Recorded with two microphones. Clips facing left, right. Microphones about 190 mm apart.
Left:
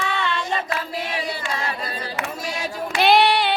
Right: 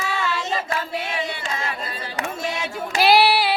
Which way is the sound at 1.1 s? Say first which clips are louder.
Even; 35° left (ahead or behind).